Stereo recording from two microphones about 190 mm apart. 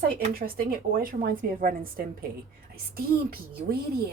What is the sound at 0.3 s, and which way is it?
Speech, 50° right (ahead or behind).